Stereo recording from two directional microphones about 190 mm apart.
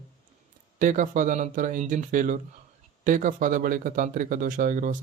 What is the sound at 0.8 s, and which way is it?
Speech, 40° right (ahead or behind).